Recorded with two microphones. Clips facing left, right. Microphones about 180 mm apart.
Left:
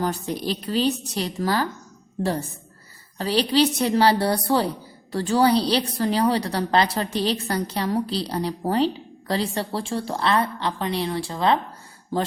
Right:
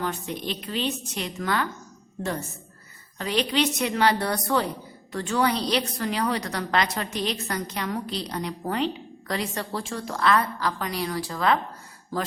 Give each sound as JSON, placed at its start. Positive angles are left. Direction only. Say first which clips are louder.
{"t": 0.0, "sound": "a woman's voice", "louder": "left 4 dB", "side_deg": 35}